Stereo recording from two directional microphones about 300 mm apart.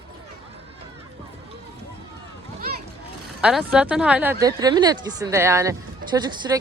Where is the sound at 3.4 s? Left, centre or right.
Centre.